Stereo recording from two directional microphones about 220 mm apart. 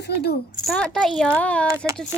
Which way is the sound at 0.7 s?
5° left (ahead or behind).